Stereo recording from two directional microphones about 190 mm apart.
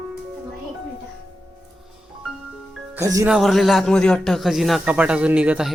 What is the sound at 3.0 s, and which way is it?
Speech, 15° right (ahead or behind).